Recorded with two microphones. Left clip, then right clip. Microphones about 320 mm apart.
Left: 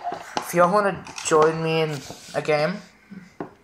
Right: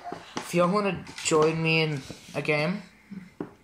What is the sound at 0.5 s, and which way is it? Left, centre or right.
Speech, left.